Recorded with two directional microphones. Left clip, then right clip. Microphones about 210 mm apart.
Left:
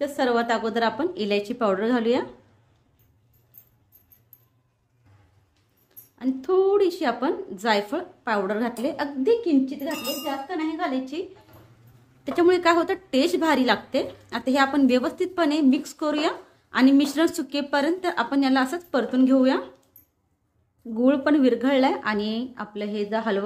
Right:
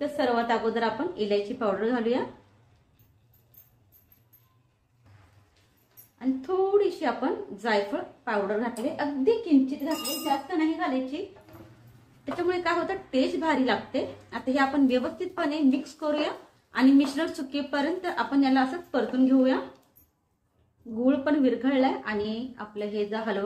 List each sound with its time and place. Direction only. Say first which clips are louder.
0.0 s a woman's voice: left 3 dB; 50° left (ahead or behind)
6.1 s a woman's voice: left 5 dB; 55° left (ahead or behind)
10.8 s a woman's voice: left 1 dB; 55° left (ahead or behind)
12.4 s a woman's voice: left 8 dB; 55° left (ahead or behind)
21.0 s a woman's voice: left 4 dB; 55° left (ahead or behind)